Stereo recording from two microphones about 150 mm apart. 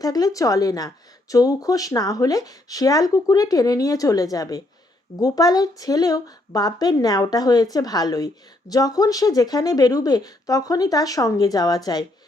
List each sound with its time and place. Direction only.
0.0 s speech: 25° left (ahead or behind)